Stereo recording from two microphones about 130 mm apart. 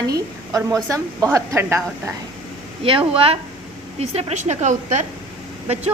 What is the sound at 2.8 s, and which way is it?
Speech, 45° right (ahead or behind).